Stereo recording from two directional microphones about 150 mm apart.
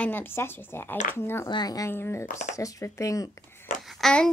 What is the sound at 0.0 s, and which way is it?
Speech, 15° left (ahead or behind).